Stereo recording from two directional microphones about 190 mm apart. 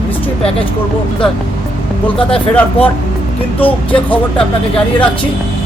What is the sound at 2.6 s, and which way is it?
Speech, 10° left (ahead or behind).